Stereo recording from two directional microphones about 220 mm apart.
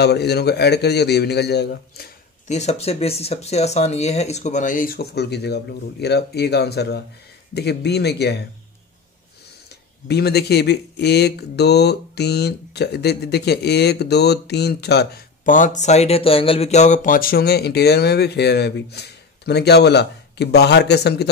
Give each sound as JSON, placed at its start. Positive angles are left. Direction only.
{"t": 0.0, "sound": "speech", "side_deg": 50}
{"t": 2.4, "sound": "speech", "side_deg": 30}
{"t": 9.7, "sound": "speech", "side_deg": 50}